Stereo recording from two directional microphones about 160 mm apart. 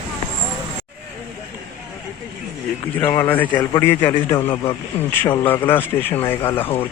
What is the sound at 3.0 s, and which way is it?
Speech, 10° left (ahead or behind).